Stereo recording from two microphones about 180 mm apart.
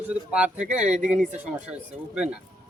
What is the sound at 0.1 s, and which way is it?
Speech, 5° right (ahead or behind).